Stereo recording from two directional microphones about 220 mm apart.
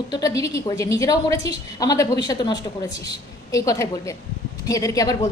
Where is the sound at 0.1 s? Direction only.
15° left (ahead or behind).